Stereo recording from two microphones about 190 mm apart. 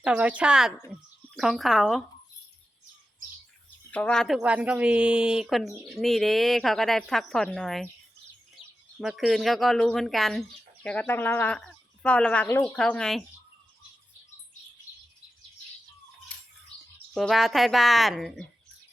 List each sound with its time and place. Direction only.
0.0 s a woman's voice: 5° right (ahead or behind)
3.9 s a woman's voice: 5° left (ahead or behind)
9.0 s a woman's voice: centre (ahead or behind)
16.3 s music: 5° left (ahead or behind)
17.2 s a woman's voice: centre (ahead or behind)